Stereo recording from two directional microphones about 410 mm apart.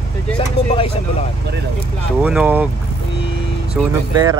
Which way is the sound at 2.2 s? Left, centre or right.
Centre.